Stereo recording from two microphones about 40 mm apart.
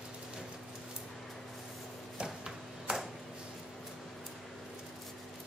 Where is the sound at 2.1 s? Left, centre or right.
Centre.